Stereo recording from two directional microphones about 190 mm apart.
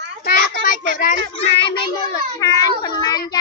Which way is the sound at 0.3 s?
50° left (ahead or behind).